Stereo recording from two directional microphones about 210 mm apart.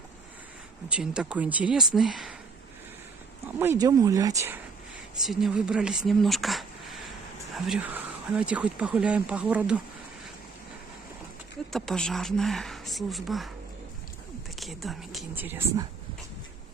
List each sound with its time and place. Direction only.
0.8 s speech: 5° right (ahead or behind)
3.5 s speech: 15° right (ahead or behind)
5.2 s speech: centre (ahead or behind)
11.7 s speech: centre (ahead or behind)
14.6 s speech: centre (ahead or behind)